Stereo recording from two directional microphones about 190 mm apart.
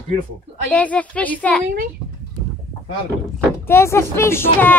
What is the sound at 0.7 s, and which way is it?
Speech, 5° left (ahead or behind).